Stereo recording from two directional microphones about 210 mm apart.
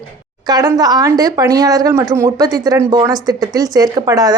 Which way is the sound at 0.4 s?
20° right (ahead or behind).